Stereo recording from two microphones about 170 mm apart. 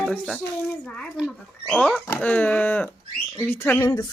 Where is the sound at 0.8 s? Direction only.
5° left (ahead or behind).